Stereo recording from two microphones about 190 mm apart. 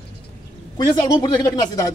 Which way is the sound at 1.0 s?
20° left (ahead or behind).